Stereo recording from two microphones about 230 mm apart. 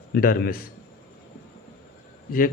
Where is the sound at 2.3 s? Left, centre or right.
Left.